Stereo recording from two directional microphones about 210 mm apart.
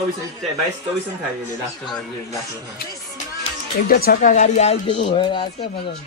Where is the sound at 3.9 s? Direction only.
45° left (ahead or behind).